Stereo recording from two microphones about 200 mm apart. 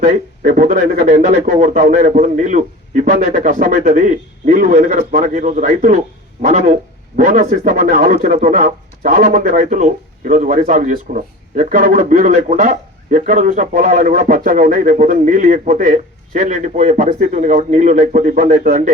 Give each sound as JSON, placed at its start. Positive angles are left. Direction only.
{"t": 0.0, "sound": "speech", "side_deg": -40}